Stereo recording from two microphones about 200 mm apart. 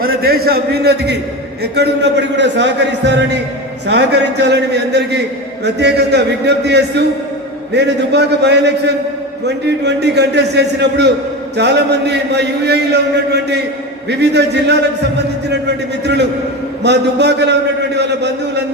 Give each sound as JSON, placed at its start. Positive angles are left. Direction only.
{"t": 0.0, "sound": "a man's voice", "side_deg": -50}
{"t": 16.8, "sound": "a man's voice", "side_deg": -60}